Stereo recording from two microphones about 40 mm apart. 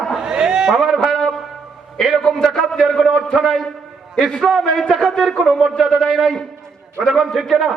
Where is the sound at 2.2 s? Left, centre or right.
Centre.